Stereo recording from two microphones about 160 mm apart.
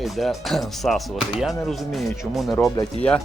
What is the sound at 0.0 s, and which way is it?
Speech, centre (ahead or behind).